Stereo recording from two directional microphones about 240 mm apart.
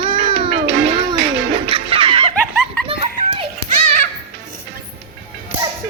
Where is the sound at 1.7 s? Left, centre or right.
Right.